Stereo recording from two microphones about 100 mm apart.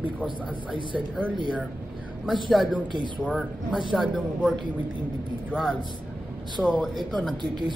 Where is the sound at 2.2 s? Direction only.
5° right (ahead or behind).